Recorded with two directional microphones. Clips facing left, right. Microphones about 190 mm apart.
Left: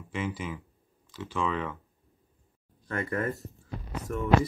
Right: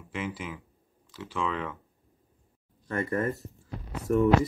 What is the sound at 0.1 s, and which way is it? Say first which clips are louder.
Speech: left 1 dB; centre (ahead or behind).